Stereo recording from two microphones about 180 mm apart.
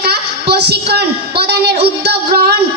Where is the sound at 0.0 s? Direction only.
60° right (ahead or behind).